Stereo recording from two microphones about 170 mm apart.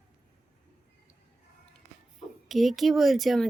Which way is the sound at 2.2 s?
Centre (ahead or behind).